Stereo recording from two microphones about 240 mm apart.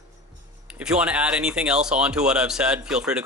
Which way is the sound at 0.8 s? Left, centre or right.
Centre.